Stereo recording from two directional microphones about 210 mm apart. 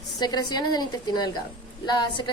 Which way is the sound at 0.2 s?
20° left (ahead or behind).